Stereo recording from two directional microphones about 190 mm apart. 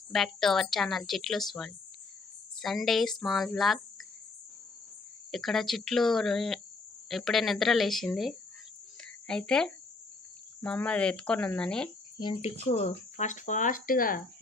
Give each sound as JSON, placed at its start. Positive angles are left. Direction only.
{"t": 0.1, "sound": "a woman's voice", "side_deg": 0}
{"t": 5.3, "sound": "a woman's voice", "side_deg": 0}
{"t": 9.0, "sound": "a sound", "side_deg": 5}
{"t": 10.6, "sound": "a woman's voice", "side_deg": 5}
{"t": 12.2, "sound": "speech", "side_deg": 30}